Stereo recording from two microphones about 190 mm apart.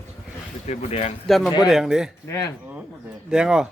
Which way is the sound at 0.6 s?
35° left (ahead or behind).